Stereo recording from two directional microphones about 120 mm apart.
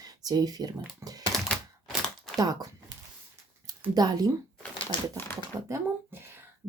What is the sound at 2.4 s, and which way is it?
Speech, 35° right (ahead or behind).